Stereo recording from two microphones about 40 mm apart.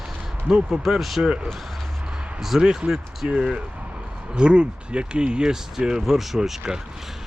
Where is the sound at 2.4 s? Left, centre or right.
Centre.